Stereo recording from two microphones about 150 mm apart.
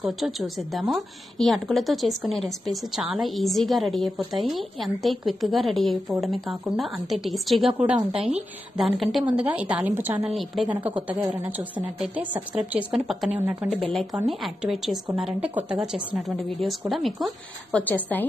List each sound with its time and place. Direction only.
0.0 s a woman's voice: centre (ahead or behind)
10.2 s a woman's voice: centre (ahead or behind)
10.8 s a woman's voice: 10° right (ahead or behind)
17.8 s a woman's voice: 10° left (ahead or behind)